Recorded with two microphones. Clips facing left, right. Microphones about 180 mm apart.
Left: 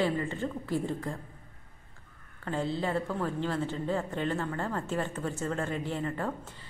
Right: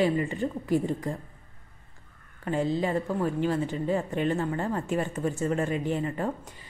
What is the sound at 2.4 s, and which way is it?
A woman's voice, 15° right (ahead or behind).